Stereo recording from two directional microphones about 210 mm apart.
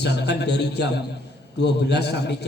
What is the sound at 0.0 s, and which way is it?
A man's voice, 55° left (ahead or behind).